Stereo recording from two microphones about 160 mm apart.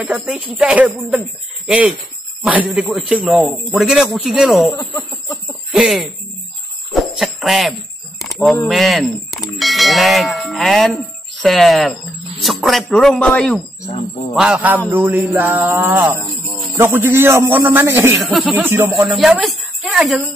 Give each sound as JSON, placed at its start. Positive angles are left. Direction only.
{"t": 0.0, "sound": "a man's voice", "side_deg": -5}
{"t": 4.7, "sound": "speech", "side_deg": 20}
{"t": 5.7, "sound": "a sound", "side_deg": -5}
{"t": 6.9, "sound": "jingle bell", "side_deg": 0}
{"t": 8.2, "sound": "single-lens reflex camera", "side_deg": 0}
{"t": 8.6, "sound": "speech", "side_deg": 0}
{"t": 9.6, "sound": "a sound", "side_deg": 0}
{"t": 11.4, "sound": "speech", "side_deg": 0}
{"t": 13.8, "sound": "speech", "side_deg": 45}
{"t": 14.3, "sound": "a man's voice", "side_deg": -5}
{"t": 18.2, "sound": "speech", "side_deg": 0}
{"t": 18.6, "sound": "a man's voice", "side_deg": -15}
{"t": 19.1, "sound": "speech", "side_deg": 0}